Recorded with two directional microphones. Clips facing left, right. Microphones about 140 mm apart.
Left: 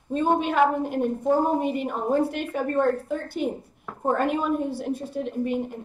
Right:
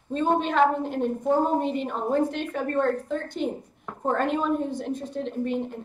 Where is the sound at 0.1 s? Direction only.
10° left (ahead or behind).